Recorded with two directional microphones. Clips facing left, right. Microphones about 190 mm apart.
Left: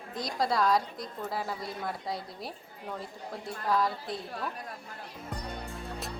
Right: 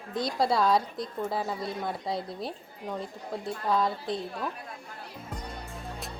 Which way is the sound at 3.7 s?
25° right (ahead or behind).